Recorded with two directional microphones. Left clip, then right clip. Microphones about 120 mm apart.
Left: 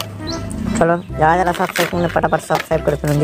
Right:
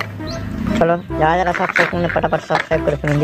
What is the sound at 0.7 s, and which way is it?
Speech, 30° left (ahead or behind).